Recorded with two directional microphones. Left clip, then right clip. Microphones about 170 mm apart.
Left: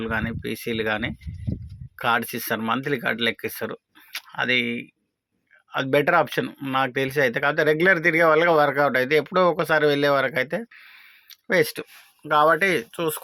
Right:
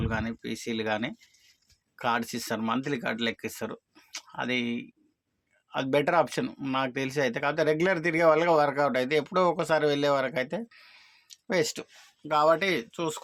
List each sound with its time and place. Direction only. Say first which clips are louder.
0.0 s speech: left 6 dB; 5° left (ahead or behind)